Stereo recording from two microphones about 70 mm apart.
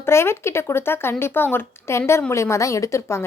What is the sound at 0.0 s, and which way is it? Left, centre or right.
A woman's voice, left.